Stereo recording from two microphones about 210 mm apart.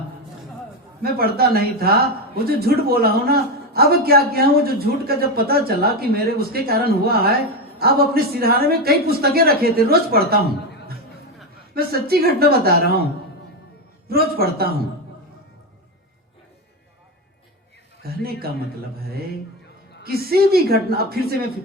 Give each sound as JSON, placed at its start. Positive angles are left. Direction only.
{"t": 1.0, "sound": "speech", "side_deg": -45}
{"t": 11.7, "sound": "speech", "side_deg": -45}
{"t": 14.1, "sound": "speech", "side_deg": -45}
{"t": 18.0, "sound": "speech", "side_deg": -45}
{"t": 20.0, "sound": "speech", "side_deg": -45}